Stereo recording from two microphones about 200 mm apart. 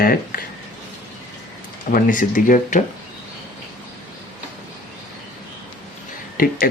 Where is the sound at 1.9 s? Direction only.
40° left (ahead or behind).